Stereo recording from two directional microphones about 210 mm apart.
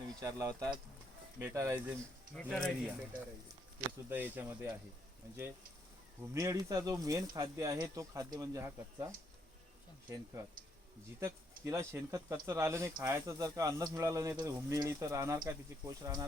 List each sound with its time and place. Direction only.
0.2 s speech: 15° right (ahead or behind)
2.3 s speech: 5° left (ahead or behind)
3.8 s speech: 10° right (ahead or behind)
6.3 s speech: 15° right (ahead or behind)
11.2 s speech: 15° right (ahead or behind)